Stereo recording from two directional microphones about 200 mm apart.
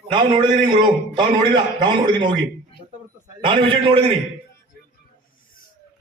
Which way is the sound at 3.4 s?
25° right (ahead or behind).